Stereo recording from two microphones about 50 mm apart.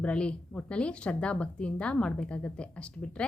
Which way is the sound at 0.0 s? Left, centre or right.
Left.